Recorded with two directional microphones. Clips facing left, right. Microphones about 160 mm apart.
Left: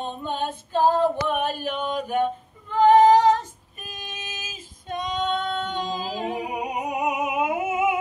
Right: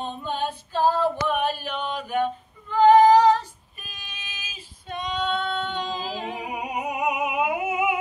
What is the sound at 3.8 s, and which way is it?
Female singing, 45° left (ahead or behind).